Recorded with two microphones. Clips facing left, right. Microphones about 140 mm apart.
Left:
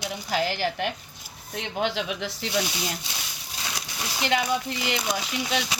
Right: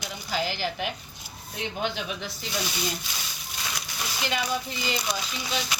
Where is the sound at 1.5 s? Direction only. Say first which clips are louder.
Left 3 dB; 85° left.